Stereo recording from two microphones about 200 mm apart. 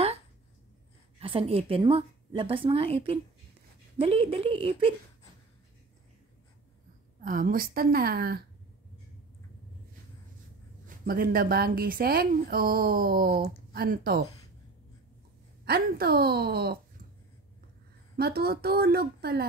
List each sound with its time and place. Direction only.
1.2 s a woman's voice: 25° right (ahead or behind)
7.2 s speech: 45° right (ahead or behind)
11.1 s speech: 45° right (ahead or behind)
15.6 s speech: 50° right (ahead or behind)
18.1 s speech: 50° right (ahead or behind)